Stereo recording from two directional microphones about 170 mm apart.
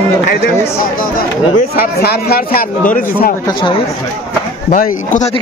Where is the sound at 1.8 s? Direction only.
70° left (ahead or behind).